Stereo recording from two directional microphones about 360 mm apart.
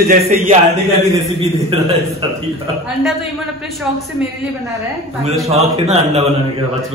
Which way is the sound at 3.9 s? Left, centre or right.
Centre.